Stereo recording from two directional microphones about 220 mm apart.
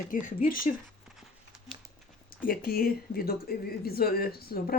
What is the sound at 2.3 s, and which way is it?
Speech, 40° left (ahead or behind).